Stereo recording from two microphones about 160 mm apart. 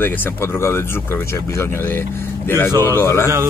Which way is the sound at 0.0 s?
15° left (ahead or behind).